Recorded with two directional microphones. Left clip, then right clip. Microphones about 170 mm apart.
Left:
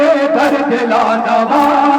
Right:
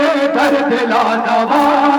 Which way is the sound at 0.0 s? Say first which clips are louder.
Left 2 dB; 30° right (ahead or behind).